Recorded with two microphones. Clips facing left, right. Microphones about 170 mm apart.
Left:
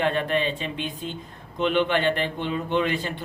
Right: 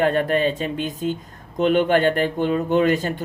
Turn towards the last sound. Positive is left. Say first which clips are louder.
# right 6 dB
turn(degrees=-45)  # may be behind; listen again after turning